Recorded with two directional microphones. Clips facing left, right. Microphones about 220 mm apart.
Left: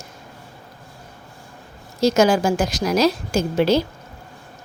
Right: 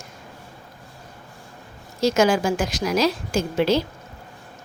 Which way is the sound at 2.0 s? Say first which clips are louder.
Left 2 dB; 40° left (ahead or behind).